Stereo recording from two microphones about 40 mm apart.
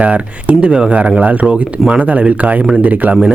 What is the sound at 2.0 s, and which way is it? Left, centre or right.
Speech, right.